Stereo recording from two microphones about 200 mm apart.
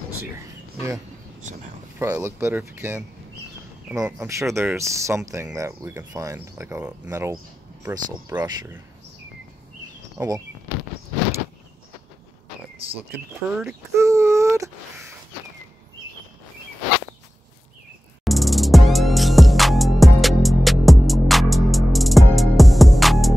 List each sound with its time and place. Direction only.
2.0 s speech: 15° right (ahead or behind)
8.4 s speech: 10° right (ahead or behind)
10.1 s speech: 15° right (ahead or behind)
13.1 s speech: centre (ahead or behind)
13.9 s a sound: 15° right (ahead or behind)
18.2 s music: centre (ahead or behind)